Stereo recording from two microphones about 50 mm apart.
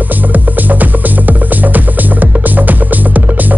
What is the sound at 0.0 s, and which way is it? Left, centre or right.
Music, right.